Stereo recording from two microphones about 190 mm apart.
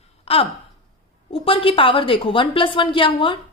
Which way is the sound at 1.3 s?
30° left (ahead or behind).